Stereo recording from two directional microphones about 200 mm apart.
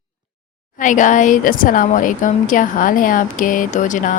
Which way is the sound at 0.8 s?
40° left (ahead or behind).